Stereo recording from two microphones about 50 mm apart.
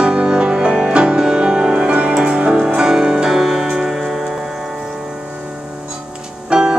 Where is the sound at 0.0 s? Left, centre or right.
Centre.